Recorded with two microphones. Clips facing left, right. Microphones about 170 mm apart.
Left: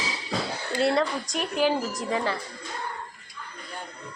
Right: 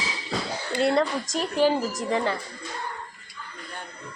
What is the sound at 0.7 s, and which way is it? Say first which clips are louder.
Speech: right 1 dB; centre (ahead or behind).